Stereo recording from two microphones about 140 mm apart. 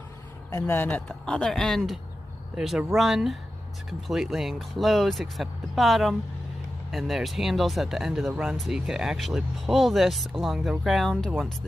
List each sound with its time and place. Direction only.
0.5 s speech: 20° left (ahead or behind); by 11.5 s 5° right (ahead or behind)